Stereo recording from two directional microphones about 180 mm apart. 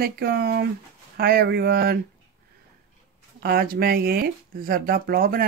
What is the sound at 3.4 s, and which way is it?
Speech, 55° right (ahead or behind).